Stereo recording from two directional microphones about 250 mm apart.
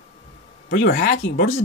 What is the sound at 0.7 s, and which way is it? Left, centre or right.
Speech, left.